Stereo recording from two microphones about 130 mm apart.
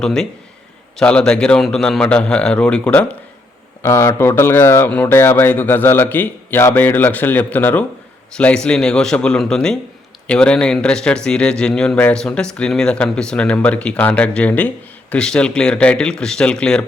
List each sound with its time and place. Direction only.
0.0 s speech: 5° left (ahead or behind)